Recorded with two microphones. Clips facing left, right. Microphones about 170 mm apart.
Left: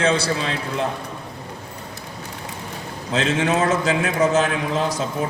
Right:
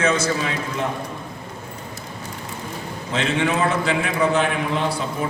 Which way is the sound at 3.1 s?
40° left (ahead or behind).